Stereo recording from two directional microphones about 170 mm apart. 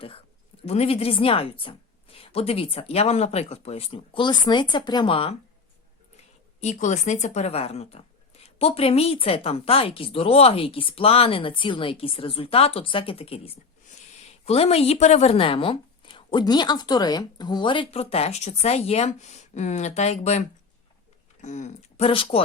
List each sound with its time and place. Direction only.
0.6 s speech: 40° left (ahead or behind)
6.6 s speech: 45° left (ahead or behind)
21.4 s speech: 45° left (ahead or behind)